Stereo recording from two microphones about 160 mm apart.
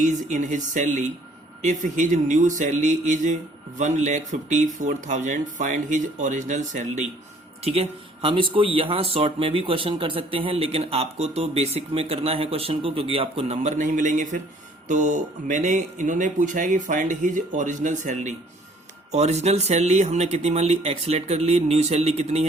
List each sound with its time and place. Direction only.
0.0 s speech: 50° right (ahead or behind)
7.6 s speech: 40° right (ahead or behind)